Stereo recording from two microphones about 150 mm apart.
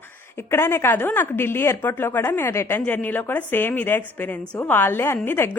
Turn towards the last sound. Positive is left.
turn(degrees=15)  # may be behind; listen again after turning